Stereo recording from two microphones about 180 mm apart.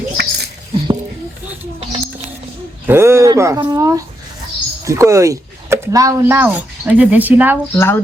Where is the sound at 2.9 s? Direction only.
15° right (ahead or behind).